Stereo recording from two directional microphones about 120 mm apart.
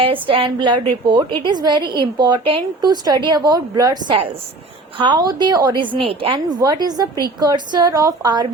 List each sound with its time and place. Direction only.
0.0 s a woman's voice: 50° right (ahead or behind)
6.6 s a woman's voice: 35° right (ahead or behind)